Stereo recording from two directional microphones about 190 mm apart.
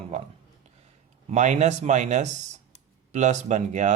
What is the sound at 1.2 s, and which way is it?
A man's voice, 40° right (ahead or behind).